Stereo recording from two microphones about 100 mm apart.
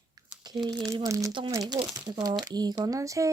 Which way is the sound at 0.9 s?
35° right (ahead or behind).